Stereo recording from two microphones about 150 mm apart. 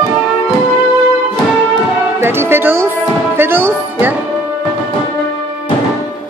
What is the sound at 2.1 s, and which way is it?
Music, 15° right (ahead or behind).